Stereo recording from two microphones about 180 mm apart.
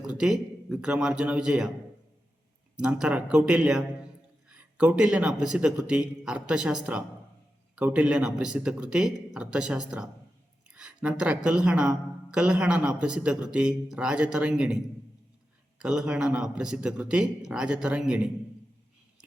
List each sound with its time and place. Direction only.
0.1 s speech: 5° right (ahead or behind)
2.7 s speech: 5° right (ahead or behind)
15.8 s speech: 5° right (ahead or behind)